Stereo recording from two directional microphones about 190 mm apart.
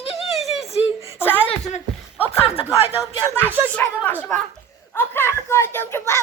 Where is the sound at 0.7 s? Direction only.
30° left (ahead or behind).